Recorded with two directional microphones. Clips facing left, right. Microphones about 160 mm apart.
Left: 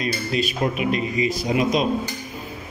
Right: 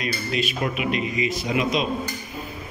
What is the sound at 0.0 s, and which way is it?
Speech, 40° left (ahead or behind).